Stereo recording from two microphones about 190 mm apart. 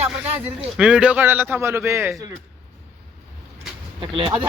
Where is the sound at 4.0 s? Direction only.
25° right (ahead or behind).